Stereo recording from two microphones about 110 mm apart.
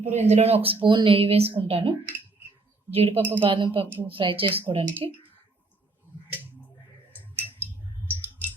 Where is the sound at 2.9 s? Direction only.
65° right (ahead or behind).